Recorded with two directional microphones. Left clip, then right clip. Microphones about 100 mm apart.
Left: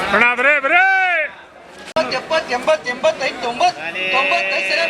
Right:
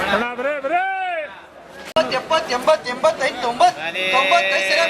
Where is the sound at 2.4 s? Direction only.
35° right (ahead or behind).